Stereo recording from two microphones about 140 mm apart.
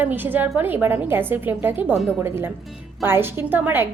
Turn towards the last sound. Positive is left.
turn(degrees=-15)  # may be behind; listen again after turning